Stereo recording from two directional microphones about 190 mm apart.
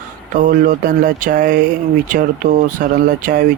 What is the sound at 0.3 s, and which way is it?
Speech, 45° right (ahead or behind).